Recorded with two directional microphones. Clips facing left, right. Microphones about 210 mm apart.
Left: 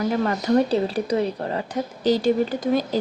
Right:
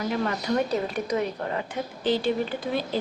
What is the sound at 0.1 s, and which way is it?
Speech, 35° left (ahead or behind).